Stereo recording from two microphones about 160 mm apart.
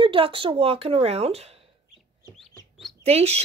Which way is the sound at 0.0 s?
35° right (ahead or behind).